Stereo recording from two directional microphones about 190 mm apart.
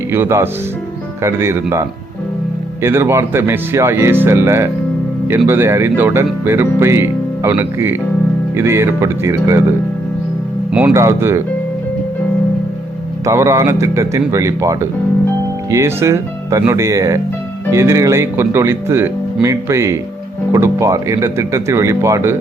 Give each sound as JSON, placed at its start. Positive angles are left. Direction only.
{"t": 0.1, "sound": "speech", "side_deg": -10}
{"t": 2.8, "sound": "speech", "side_deg": -15}
{"t": 10.7, "sound": "speech", "side_deg": -5}
{"t": 13.2, "sound": "speech", "side_deg": -15}